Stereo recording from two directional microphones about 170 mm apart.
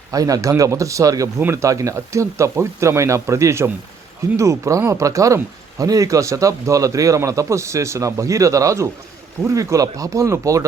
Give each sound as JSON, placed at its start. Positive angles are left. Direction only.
{"t": 0.1, "sound": "speech", "side_deg": -20}